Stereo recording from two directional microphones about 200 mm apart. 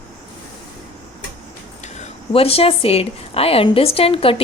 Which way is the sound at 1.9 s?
30° left (ahead or behind).